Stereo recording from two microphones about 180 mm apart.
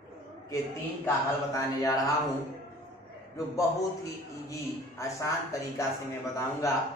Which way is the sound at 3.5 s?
20° left (ahead or behind).